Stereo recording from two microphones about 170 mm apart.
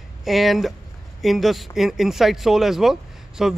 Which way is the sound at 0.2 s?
Centre (ahead or behind).